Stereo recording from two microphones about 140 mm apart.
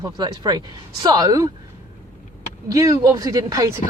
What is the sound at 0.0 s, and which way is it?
Speech, 30° right (ahead or behind).